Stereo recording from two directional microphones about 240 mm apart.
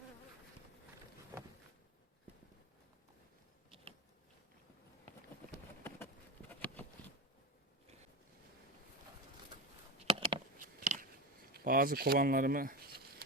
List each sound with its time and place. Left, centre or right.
10.1 s a sound: right
10.6 s biting: right
11.5 s speech: right